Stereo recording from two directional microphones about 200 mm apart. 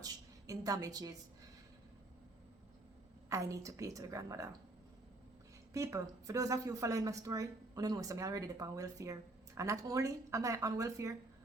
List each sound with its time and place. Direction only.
0.0 s a sound: 15° right (ahead or behind)
3.2 s speech: 15° right (ahead or behind)
5.7 s speech: 15° right (ahead or behind)